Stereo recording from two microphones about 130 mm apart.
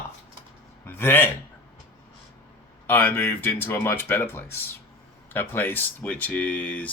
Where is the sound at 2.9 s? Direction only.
15° left (ahead or behind).